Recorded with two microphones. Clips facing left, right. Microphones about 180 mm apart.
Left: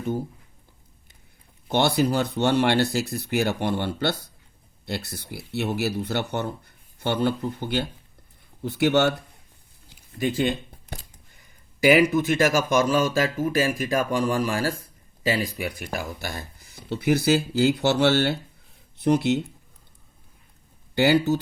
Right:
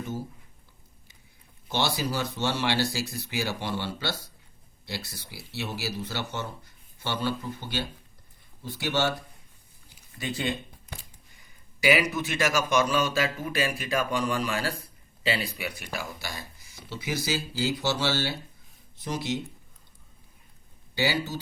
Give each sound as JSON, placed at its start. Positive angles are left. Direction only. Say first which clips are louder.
{"t": 1.7, "sound": "speech", "louder": "left 7 dB", "side_deg": 60}
{"t": 10.2, "sound": "speech", "louder": "left 8 dB", "side_deg": 55}
{"t": 11.8, "sound": "speech", "louder": "left 7 dB", "side_deg": 50}
{"t": 20.9, "sound": "speech", "louder": "left 9 dB", "side_deg": 60}